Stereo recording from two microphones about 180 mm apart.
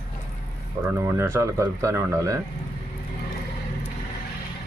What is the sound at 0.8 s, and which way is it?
Speech, 15° right (ahead or behind).